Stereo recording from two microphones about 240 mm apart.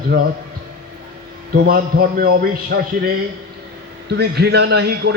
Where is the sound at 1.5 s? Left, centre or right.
Right.